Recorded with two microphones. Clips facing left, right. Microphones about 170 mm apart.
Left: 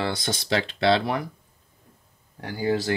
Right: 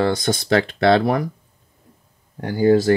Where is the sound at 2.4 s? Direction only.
45° right (ahead or behind).